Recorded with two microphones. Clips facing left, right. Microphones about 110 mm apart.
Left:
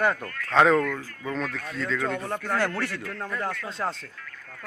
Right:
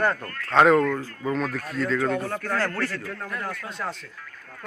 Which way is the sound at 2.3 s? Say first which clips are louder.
Even; 20° left (ahead or behind).